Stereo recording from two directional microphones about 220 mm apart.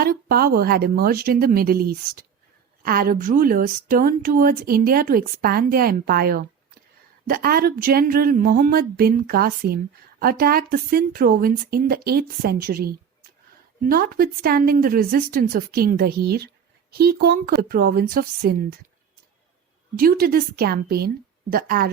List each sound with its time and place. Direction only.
0.0 s a woman's voice: 45° right (ahead or behind)
20.0 s a woman's voice: 40° right (ahead or behind)